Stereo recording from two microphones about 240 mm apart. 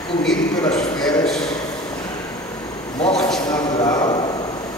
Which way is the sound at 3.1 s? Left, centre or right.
Centre.